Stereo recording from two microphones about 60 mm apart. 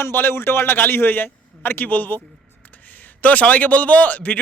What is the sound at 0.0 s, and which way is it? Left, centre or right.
A man's voice, left.